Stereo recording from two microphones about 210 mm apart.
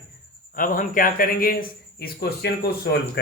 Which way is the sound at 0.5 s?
40° left (ahead or behind).